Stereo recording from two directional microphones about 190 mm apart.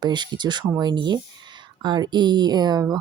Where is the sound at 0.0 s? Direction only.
25° right (ahead or behind).